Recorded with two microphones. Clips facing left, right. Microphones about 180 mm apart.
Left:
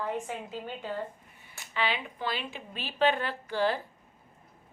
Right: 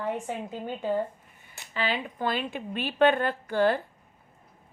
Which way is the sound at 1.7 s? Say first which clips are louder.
Right 2 dB; 40° right (ahead or behind).